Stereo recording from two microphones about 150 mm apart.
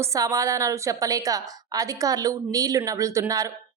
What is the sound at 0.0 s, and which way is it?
A woman's voice, 20° right (ahead or behind).